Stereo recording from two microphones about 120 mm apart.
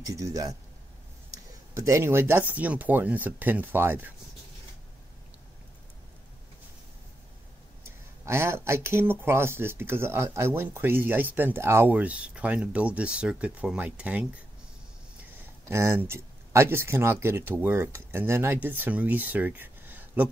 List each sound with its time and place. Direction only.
0.1 s speech: 30° right (ahead or behind)
1.3 s a sound: 25° right (ahead or behind)
2.5 s speech: 15° right (ahead or behind)
7.8 s speech: 20° right (ahead or behind)
15.7 s speech: 20° right (ahead or behind)